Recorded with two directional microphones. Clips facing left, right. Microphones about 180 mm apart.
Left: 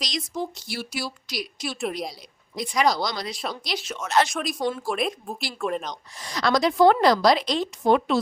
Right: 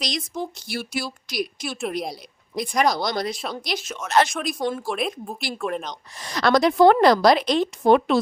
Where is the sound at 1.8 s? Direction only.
Centre (ahead or behind).